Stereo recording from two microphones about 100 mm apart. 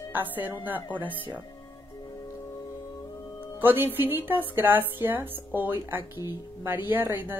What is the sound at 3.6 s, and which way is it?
Speech, 20° right (ahead or behind).